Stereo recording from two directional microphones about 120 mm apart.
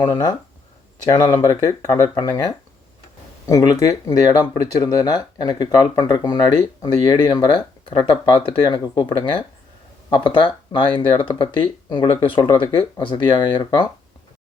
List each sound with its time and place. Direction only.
0.0 s speech: 35° left (ahead or behind)